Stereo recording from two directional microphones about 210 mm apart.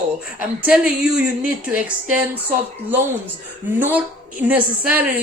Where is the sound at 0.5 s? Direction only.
5° right (ahead or behind).